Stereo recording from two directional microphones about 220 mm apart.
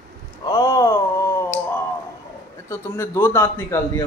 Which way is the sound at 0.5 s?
15° left (ahead or behind).